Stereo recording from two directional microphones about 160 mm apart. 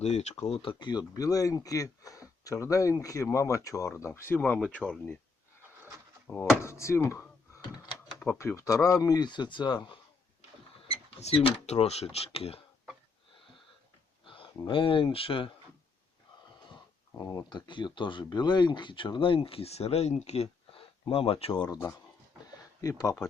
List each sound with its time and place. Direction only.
0.0 s speech: 45° left (ahead or behind); by 5.1 s 5° left (ahead or behind)
6.4 s a sound: 15° left (ahead or behind)
8.4 s speech: 20° left (ahead or behind)
10.9 s speech: 40° left (ahead or behind)
14.3 s a sound: 30° left (ahead or behind)
14.7 s speech: 30° left (ahead or behind)
16.7 s speech: 20° left (ahead or behind); by 21.6 s 35° left (ahead or behind)
21.7 s speech: 15° left (ahead or behind)